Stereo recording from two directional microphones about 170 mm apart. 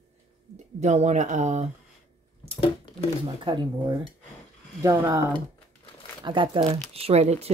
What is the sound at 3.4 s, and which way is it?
Speech, 30° right (ahead or behind).